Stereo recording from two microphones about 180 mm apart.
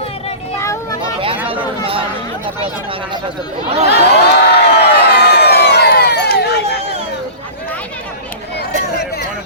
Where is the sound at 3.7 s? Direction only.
40° right (ahead or behind).